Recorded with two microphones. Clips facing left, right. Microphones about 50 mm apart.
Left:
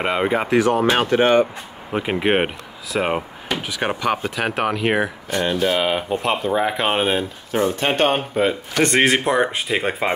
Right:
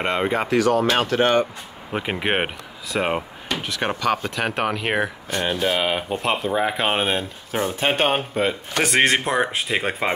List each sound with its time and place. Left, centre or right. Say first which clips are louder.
0.0 s speech: left 2 dB; centre
0.5 s speech: left 1 dB; left
1.9 s speech: left 4 dB; centre
5.4 s speech: left 2 dB; centre